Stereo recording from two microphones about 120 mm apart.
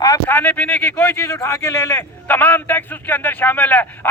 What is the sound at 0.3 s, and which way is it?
A man's voice, 15° left (ahead or behind).